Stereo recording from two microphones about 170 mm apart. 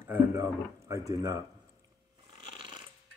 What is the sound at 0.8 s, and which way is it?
Speech, 20° right (ahead or behind).